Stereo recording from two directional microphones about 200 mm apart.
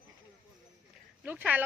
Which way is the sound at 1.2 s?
5° right (ahead or behind).